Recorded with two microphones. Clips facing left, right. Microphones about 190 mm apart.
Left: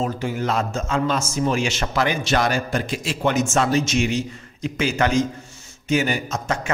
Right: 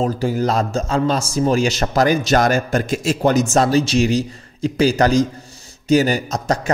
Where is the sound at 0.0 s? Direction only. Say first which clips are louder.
Right 5 dB; 35° right (ahead or behind).